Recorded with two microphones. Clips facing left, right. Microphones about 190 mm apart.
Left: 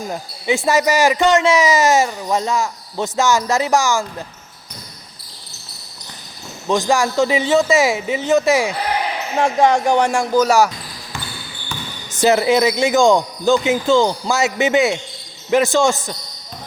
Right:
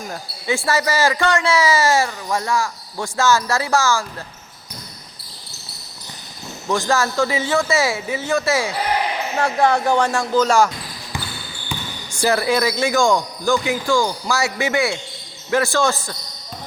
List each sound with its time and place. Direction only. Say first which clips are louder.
0.1 s speech: left 3 dB; 20° left (ahead or behind)
6.7 s speech: left 3 dB; 15° left (ahead or behind)
12.2 s speech: left 4 dB; 20° left (ahead or behind)